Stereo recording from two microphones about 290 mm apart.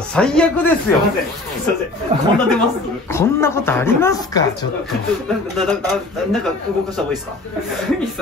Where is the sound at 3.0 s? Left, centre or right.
Centre.